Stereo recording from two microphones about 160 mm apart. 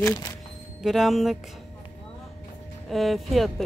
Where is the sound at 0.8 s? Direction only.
Centre (ahead or behind).